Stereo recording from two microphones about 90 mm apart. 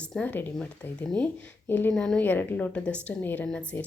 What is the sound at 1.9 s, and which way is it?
A woman's voice, 10° left (ahead or behind).